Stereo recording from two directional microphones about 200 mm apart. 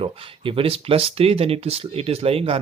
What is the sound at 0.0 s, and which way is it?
Speech, 25° right (ahead or behind).